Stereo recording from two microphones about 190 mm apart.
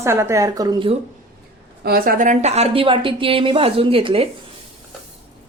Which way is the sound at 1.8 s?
50° right (ahead or behind).